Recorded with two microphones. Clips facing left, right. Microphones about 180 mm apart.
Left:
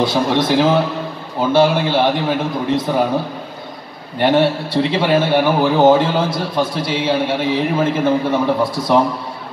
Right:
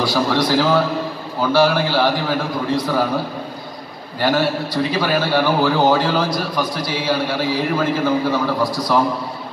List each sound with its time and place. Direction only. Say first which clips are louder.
0.0 s a man's voice: left 2 dB; 20° left (ahead or behind)
4.2 s a man's voice: left 4 dB; 25° left (ahead or behind)